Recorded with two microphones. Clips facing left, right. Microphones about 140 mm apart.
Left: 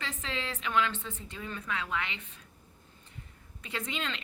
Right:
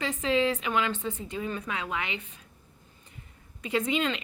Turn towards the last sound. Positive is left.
turn(degrees=-15)  # may be behind; listen again after turning